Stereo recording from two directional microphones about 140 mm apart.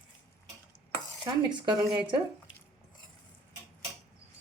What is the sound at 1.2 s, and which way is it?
Speech, 35° right (ahead or behind).